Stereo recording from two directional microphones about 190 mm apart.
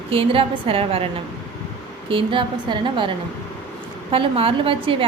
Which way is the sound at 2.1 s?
25° right (ahead or behind).